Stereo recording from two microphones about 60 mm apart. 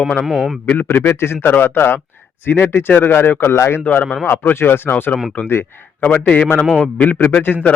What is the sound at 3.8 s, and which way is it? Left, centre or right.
A man's voice, left.